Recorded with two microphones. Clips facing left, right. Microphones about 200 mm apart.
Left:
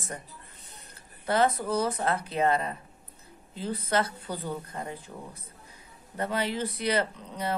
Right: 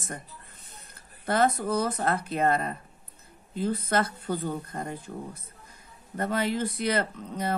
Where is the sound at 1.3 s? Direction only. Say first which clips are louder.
Right 1 dB; 50° right (ahead or behind).